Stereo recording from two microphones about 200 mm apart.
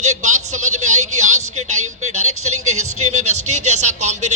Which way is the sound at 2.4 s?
90° right.